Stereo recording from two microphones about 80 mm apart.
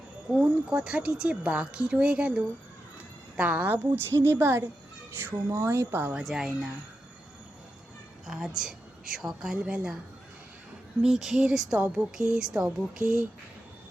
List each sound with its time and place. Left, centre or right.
0.3 s a woman's voice: centre
6.1 s speech: centre
8.3 s speech: centre
11.0 s speech: centre
13.0 s speech: left